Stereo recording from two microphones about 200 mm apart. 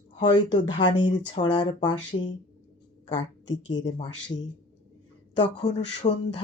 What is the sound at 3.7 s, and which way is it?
Speech, 20° left (ahead or behind).